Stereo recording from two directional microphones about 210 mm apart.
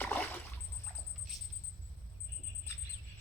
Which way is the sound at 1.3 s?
Centre (ahead or behind).